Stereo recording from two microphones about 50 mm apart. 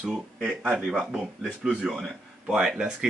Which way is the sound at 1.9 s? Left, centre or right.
Centre.